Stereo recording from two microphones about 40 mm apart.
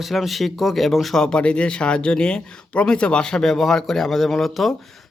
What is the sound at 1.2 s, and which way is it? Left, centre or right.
Speech, left.